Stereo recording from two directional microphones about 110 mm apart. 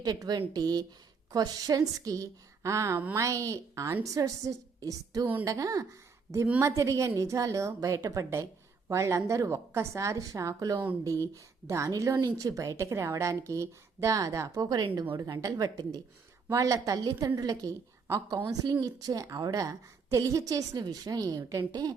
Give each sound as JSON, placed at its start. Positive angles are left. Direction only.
{"t": 0.0, "sound": "a woman's voice", "side_deg": -40}